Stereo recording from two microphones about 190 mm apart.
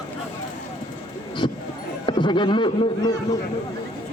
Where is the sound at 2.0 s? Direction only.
25° left (ahead or behind).